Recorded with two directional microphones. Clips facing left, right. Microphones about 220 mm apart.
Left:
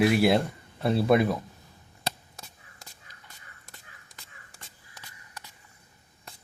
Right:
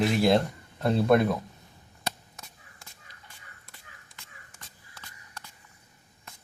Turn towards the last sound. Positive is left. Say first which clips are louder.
# even
turn(degrees=35)  # may be behind; listen again after turning